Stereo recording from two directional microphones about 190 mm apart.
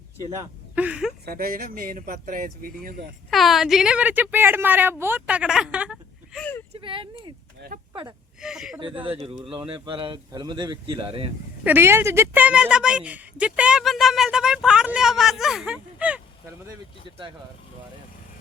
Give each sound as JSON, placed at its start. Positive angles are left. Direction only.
{"t": 0.8, "sound": "a woman's voice", "side_deg": -5}
{"t": 1.2, "sound": "speech", "side_deg": -50}
{"t": 3.2, "sound": "a woman's voice", "side_deg": 0}
{"t": 6.4, "sound": "speech", "side_deg": 10}
{"t": 6.7, "sound": "speech", "side_deg": -25}
{"t": 7.6, "sound": "speech", "side_deg": -60}
{"t": 8.4, "sound": "a woman's voice", "side_deg": -5}
{"t": 8.8, "sound": "speech", "side_deg": -25}
{"t": 11.6, "sound": "a woman's voice", "side_deg": -10}